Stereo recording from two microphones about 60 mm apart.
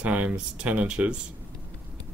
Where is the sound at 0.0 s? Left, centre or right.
Right.